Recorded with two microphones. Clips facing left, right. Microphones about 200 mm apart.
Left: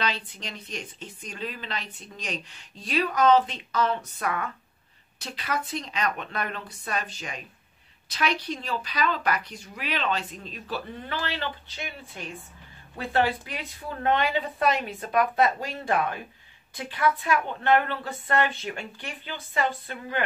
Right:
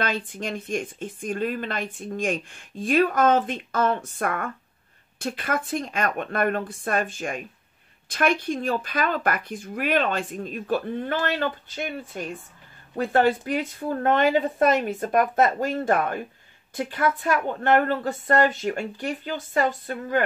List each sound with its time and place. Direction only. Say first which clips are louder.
0.0 s speech: right 4 dB; 50° right (ahead or behind)